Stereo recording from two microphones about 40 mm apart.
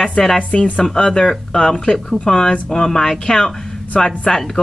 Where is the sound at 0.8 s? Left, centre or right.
Centre.